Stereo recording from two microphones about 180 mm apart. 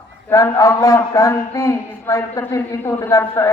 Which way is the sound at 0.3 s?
15° left (ahead or behind).